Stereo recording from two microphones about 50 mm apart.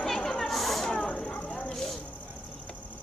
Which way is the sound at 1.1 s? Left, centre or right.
Centre.